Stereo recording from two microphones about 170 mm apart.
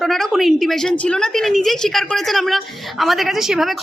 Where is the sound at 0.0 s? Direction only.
Centre (ahead or behind).